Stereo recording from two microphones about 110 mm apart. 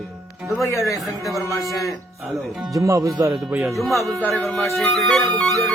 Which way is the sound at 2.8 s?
30° right (ahead or behind).